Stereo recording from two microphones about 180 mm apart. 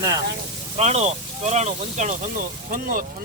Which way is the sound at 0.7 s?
40° right (ahead or behind).